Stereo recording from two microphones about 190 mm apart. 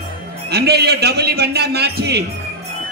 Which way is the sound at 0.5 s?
60° right (ahead or behind).